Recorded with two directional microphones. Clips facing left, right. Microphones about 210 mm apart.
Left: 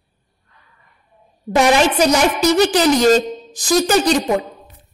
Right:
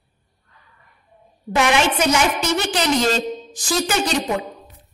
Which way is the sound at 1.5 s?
35° left (ahead or behind).